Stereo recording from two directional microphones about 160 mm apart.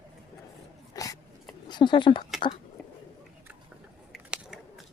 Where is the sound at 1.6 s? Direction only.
30° left (ahead or behind).